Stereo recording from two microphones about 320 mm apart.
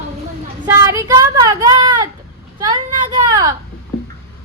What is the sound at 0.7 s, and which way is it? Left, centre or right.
A woman's voice, centre.